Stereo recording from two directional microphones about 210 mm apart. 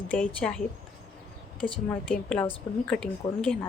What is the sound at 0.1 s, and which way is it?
Speech, 5° left (ahead or behind).